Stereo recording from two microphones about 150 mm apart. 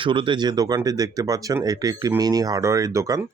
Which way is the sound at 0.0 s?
35° right (ahead or behind).